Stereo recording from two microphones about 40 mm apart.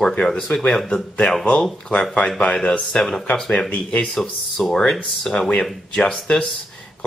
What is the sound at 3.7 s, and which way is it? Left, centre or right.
Speech, left.